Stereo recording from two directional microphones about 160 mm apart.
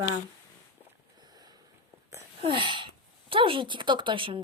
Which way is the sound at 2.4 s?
30° right (ahead or behind).